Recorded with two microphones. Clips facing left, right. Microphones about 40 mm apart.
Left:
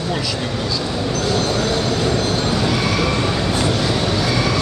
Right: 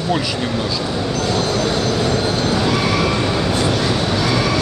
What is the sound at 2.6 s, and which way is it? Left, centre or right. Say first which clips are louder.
Neigh: right 1 dB; centre.